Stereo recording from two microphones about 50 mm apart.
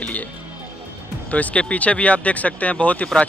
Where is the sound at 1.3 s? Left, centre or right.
Left.